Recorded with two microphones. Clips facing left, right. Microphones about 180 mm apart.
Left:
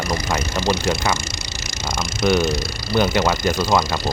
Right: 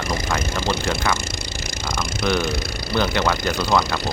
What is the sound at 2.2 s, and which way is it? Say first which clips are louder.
Speech: left 4 dB; 20° left (ahead or behind).